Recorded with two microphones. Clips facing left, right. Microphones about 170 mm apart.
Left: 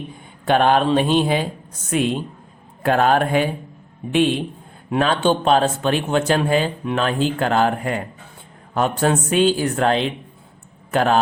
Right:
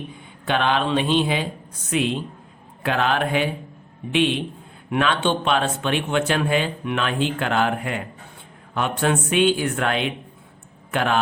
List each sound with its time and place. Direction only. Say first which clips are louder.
0.4 s speech: left 5 dB; 45° left (ahead or behind)